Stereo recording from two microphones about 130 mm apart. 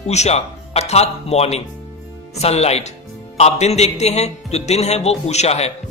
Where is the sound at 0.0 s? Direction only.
60° left (ahead or behind).